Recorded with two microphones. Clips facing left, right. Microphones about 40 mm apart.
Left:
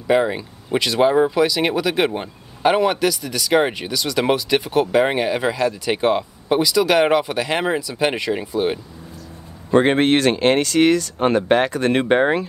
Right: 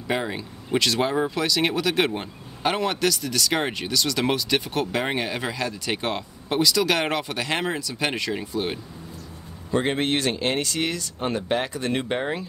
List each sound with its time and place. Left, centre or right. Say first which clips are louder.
0.1 s speech: left 9 dB; centre
9.7 s speech: left 8 dB; left